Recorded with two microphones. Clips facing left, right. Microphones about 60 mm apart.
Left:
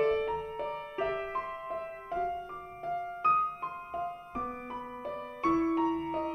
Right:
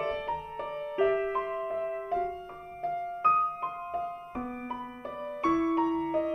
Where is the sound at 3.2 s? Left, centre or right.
Centre.